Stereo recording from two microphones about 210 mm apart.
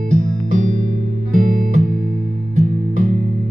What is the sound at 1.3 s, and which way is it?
Music, 40° right (ahead or behind).